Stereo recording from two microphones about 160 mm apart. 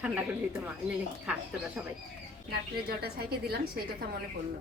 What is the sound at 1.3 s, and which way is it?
Speech, 5° right (ahead or behind).